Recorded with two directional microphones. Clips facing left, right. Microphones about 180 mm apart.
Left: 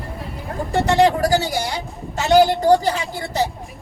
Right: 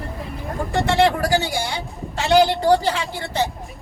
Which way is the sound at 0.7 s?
40° left (ahead or behind).